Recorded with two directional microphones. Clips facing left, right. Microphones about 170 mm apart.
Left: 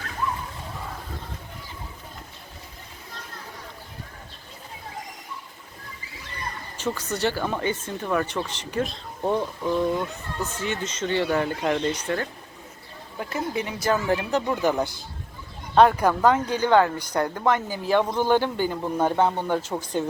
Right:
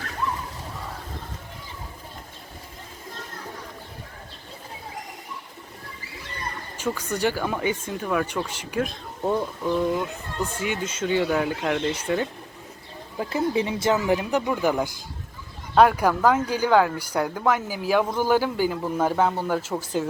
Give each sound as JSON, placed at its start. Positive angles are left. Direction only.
{"t": 6.7, "sound": "speech", "side_deg": -10}
{"t": 13.1, "sound": "speech", "side_deg": -25}